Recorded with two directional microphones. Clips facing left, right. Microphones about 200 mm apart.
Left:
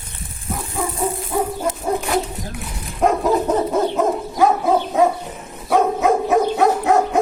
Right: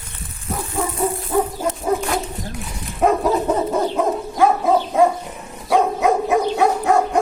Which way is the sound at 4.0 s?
Centre (ahead or behind).